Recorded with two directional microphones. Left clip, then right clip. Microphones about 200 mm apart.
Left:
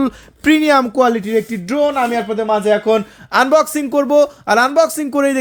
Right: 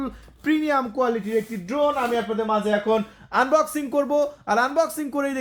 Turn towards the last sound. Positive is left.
turn(degrees=40)  # may be behind; listen again after turning